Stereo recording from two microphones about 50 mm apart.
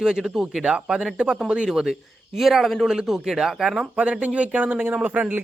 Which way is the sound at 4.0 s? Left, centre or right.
Right.